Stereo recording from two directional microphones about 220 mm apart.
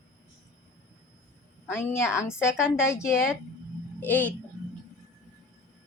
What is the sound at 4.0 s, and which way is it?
Speech, 10° left (ahead or behind).